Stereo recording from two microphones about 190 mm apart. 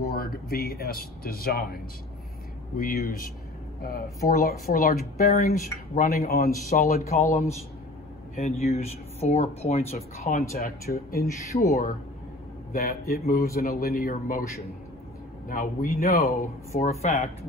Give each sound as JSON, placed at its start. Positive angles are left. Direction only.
{"t": 0.1, "sound": "speech", "side_deg": 50}
{"t": 2.8, "sound": "speech", "side_deg": 50}
{"t": 8.4, "sound": "speech", "side_deg": 35}
{"t": 10.6, "sound": "speech", "side_deg": 50}
{"t": 15.4, "sound": "speech", "side_deg": 45}
{"t": 16.8, "sound": "speech", "side_deg": 35}